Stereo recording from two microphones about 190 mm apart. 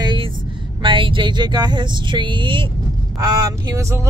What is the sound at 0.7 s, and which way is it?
Speech, 25° right (ahead or behind).